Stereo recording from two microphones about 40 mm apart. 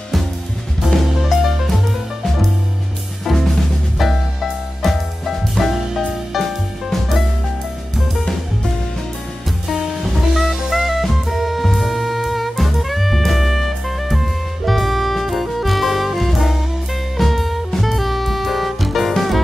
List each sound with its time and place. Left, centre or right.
1.3 s music: centre
9.8 s music: centre